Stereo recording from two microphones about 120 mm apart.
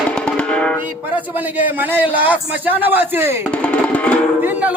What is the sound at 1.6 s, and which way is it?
A man's voice, 15° right (ahead or behind).